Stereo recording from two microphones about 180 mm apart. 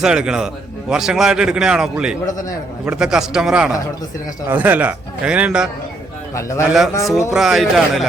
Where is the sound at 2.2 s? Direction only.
20° left (ahead or behind).